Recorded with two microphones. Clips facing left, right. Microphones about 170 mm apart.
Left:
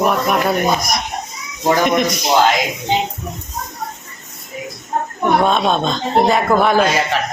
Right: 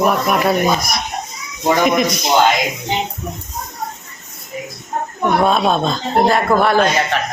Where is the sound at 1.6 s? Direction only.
Centre (ahead or behind).